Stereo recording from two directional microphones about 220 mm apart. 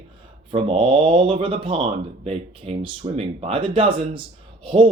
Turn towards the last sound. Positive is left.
turn(degrees=-25)  # may be behind; listen again after turning